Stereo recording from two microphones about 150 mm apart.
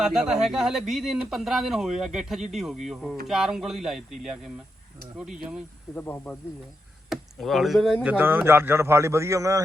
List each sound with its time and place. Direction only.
0.0 s speech: 5° right (ahead or behind)
5.9 s speech: 10° left (ahead or behind)
7.1 s speech: centre (ahead or behind)
8.0 s a man's voice: 10° right (ahead or behind)